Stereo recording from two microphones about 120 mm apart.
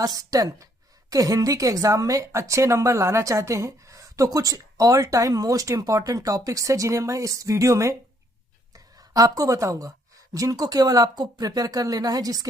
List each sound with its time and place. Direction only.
0.0 s a woman's voice: 30° right (ahead or behind)